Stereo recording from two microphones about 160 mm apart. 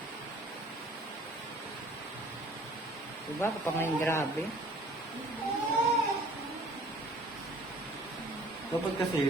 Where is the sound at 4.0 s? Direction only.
15° left (ahead or behind).